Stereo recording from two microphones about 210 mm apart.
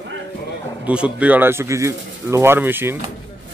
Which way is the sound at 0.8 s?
5° right (ahead or behind).